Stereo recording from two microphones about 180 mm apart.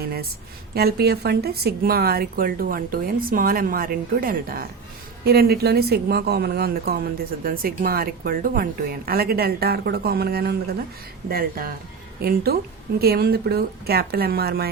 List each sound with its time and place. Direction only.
0.0 s a woman's voice: 60° right (ahead or behind)